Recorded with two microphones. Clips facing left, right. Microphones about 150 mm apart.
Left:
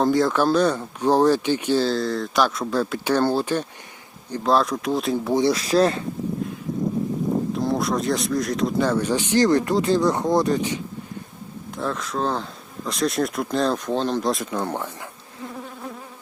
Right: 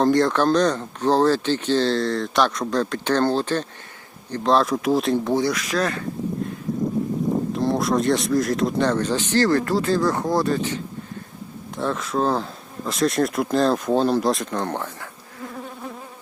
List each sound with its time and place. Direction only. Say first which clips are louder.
0.0 s speech: right 1 dB; centre (ahead or behind)
5.4 s speech: left 4 dB; 30° left (ahead or behind)
7.5 s speech: right 2 dB; centre (ahead or behind); by 10.8 s 15° left (ahead or behind)
11.8 s speech: right 3 dB; centre (ahead or behind)